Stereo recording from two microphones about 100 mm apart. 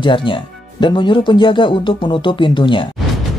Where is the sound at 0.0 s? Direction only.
55° left (ahead or behind).